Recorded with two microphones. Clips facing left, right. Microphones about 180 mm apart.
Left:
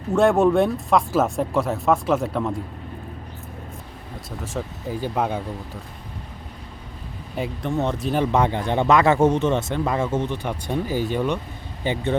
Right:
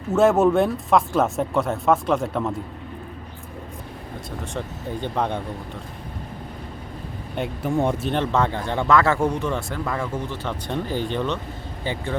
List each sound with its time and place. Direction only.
0.1 s speech: centre (ahead or behind)
4.5 s speech: 5° left (ahead or behind)
7.3 s speech: centre (ahead or behind); by 12.1 s 20° left (ahead or behind)